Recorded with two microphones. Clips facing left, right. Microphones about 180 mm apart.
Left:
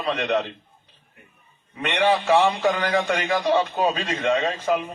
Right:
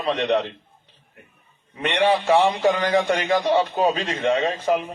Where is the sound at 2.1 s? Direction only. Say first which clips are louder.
Even; 10° right (ahead or behind).